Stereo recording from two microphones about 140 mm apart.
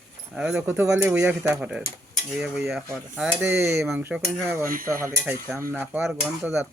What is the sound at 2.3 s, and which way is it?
Cutlery, 5° right (ahead or behind).